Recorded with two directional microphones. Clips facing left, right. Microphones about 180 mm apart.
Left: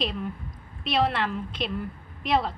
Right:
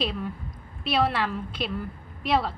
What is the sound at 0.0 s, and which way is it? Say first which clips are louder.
A woman's voice: right 1 dB; centre (ahead or behind).